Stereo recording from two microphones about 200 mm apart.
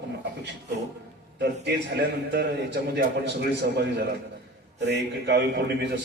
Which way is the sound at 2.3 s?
60° right (ahead or behind).